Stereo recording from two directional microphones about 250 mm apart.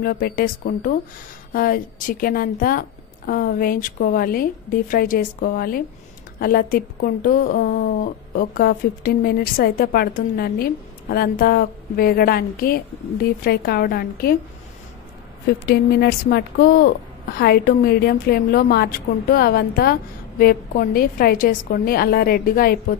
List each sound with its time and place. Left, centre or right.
0.0 s speech: left
15.6 s speech: left